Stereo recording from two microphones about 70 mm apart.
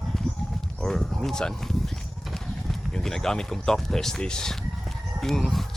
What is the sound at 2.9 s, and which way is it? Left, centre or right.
Speech, centre.